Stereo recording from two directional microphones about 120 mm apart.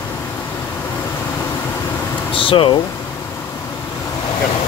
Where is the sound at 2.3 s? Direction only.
50° left (ahead or behind).